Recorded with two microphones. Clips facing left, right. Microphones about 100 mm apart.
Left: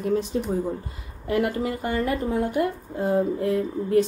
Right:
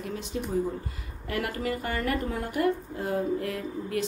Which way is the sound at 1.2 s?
20° left (ahead or behind).